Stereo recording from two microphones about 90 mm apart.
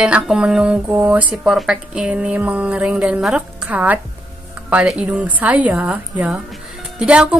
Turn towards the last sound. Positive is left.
turn(degrees=-10)  # may be behind; listen again after turning